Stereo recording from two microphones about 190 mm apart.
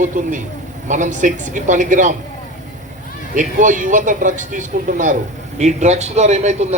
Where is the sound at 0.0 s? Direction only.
40° right (ahead or behind).